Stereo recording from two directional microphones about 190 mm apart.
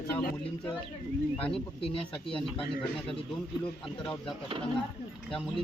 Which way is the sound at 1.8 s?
30° left (ahead or behind).